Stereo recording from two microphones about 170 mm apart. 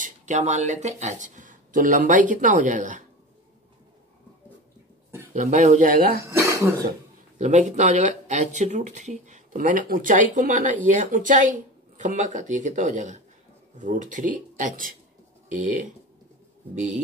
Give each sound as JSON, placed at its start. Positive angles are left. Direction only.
{"t": 0.0, "sound": "speech", "side_deg": -45}
{"t": 5.3, "sound": "speech", "side_deg": -45}
{"t": 6.2, "sound": "speech", "side_deg": -15}
{"t": 7.3, "sound": "speech", "side_deg": -45}